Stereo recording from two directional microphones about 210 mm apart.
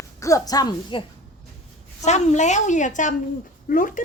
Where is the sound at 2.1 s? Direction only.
30° left (ahead or behind).